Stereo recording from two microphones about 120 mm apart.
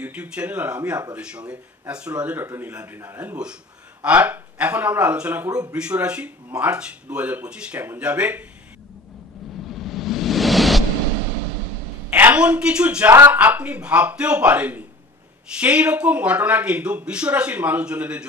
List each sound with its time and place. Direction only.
0.0 s speech: 10° right (ahead or behind)
9.7 s a sound: centre (ahead or behind)
12.1 s a woman's voice: 15° right (ahead or behind)